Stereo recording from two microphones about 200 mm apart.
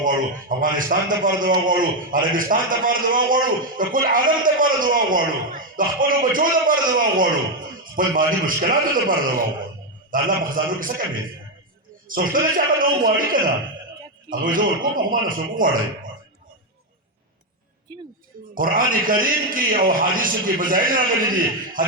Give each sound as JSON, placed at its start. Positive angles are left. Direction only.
{"t": 0.0, "sound": "a man's voice", "side_deg": -45}
{"t": 12.0, "sound": "a man's voice", "side_deg": -45}
{"t": 18.5, "sound": "a man's voice", "side_deg": -45}